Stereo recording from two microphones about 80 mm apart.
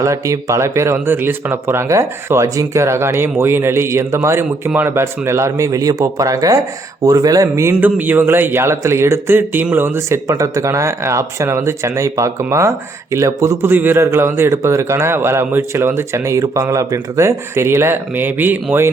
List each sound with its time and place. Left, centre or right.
0.0 s a man's voice: right
7.8 s speech: right
10.2 s a man's voice: right
13.7 s a man's voice: right